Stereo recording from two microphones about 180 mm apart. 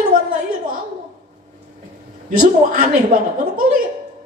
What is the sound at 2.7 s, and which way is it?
A man's voice, 50° right (ahead or behind).